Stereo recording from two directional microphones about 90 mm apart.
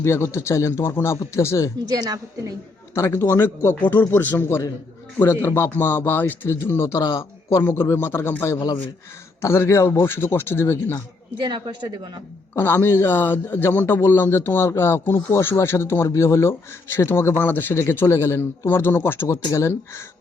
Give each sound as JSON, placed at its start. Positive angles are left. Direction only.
{"t": 0.0, "sound": "a man's voice", "side_deg": 30}
{"t": 2.0, "sound": "a woman's voice", "side_deg": -40}
{"t": 2.9, "sound": "a man's voice", "side_deg": 30}
{"t": 11.3, "sound": "a woman's voice", "side_deg": -60}
{"t": 12.5, "sound": "a man's voice", "side_deg": 25}